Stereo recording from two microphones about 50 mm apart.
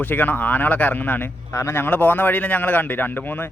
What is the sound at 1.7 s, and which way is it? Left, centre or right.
Speech, left.